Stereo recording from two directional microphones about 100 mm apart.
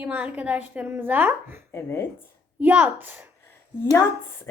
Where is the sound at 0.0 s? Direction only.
15° right (ahead or behind).